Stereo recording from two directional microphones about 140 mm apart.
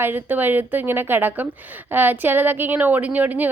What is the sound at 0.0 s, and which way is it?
A woman's voice, 15° right (ahead or behind).